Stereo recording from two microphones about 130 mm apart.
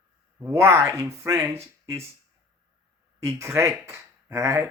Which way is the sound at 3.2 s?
25° right (ahead or behind).